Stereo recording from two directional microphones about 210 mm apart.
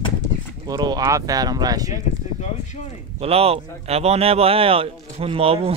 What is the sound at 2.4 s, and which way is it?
Speech, 35° left (ahead or behind).